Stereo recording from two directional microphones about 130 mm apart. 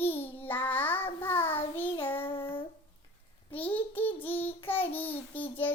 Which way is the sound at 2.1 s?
45° left (ahead or behind).